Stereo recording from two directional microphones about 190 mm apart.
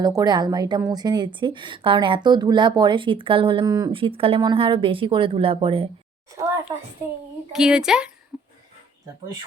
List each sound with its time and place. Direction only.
0.0 s a woman's voice: 20° right (ahead or behind)
6.7 s a child's voice: 20° right (ahead or behind)
7.5 s speech: 5° right (ahead or behind)
8.3 s a sound: 5° left (ahead or behind)